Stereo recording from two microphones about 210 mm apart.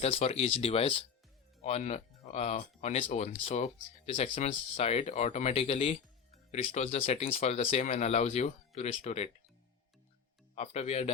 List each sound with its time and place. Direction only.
0.0 s speech: 30° left (ahead or behind)
10.5 s speech: 30° left (ahead or behind)